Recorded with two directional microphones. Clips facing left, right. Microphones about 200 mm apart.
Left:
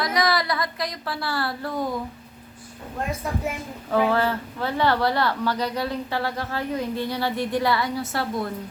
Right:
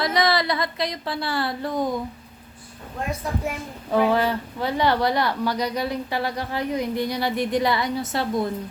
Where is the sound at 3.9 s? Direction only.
15° right (ahead or behind).